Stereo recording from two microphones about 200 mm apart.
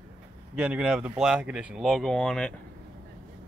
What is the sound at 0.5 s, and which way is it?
Speech, 5° right (ahead or behind).